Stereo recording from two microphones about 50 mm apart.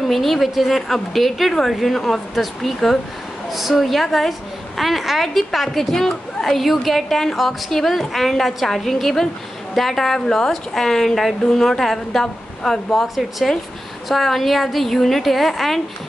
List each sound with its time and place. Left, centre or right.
0.1 s a woman's voice: centre